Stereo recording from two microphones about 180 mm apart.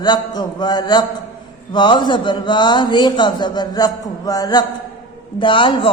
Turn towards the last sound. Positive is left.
turn(degrees=30)  # may be behind; listen again after turning